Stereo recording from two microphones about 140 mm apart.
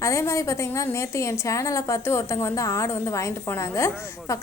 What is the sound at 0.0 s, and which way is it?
A woman's voice, 20° left (ahead or behind).